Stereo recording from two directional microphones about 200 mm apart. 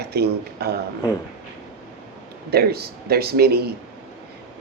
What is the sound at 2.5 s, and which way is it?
Speech, 50° right (ahead or behind).